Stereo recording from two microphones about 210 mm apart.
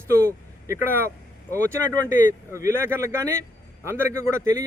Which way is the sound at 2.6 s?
10° right (ahead or behind).